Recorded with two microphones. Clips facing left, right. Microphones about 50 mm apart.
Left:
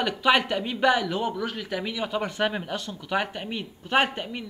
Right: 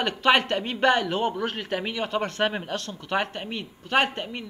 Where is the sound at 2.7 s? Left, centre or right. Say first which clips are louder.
Even; centre.